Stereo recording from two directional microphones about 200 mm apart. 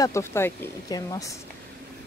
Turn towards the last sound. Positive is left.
turn(degrees=20)  # may be behind; listen again after turning